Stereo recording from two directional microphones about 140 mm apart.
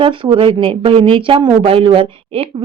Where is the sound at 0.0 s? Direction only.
40° right (ahead or behind).